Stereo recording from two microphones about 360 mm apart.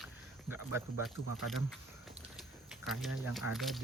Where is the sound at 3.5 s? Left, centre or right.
Centre.